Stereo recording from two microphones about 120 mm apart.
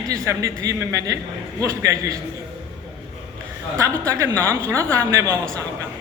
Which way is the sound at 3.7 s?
25° right (ahead or behind).